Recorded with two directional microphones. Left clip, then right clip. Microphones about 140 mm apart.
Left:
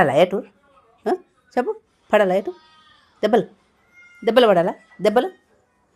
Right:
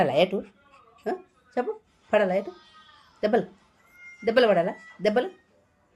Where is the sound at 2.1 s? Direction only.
90° left.